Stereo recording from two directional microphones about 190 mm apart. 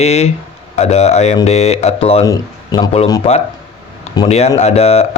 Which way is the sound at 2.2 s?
20° left (ahead or behind).